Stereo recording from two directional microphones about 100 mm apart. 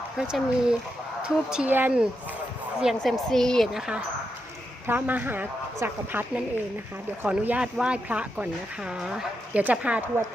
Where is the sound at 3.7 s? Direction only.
5° right (ahead or behind).